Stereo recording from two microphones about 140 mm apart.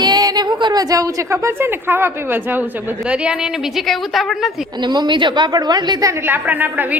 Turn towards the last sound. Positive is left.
turn(degrees=-15)  # may be behind; listen again after turning